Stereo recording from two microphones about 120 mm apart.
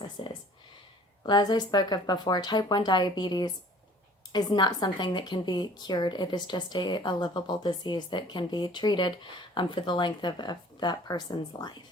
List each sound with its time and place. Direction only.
0.2 s speech: 45° left (ahead or behind)
1.2 s a woman's voice: 35° left (ahead or behind)